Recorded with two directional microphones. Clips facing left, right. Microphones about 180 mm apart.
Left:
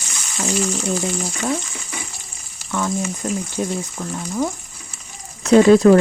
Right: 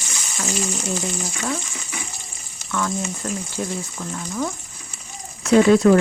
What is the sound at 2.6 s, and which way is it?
Frying, 15° left (ahead or behind).